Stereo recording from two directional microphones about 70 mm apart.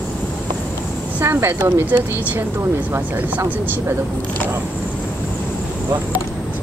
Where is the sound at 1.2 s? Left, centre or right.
Right.